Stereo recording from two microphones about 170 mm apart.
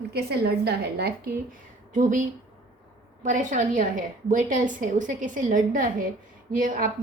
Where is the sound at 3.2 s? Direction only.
50° right (ahead or behind).